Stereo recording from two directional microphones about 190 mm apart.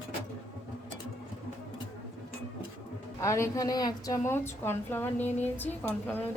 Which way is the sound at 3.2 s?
15° left (ahead or behind).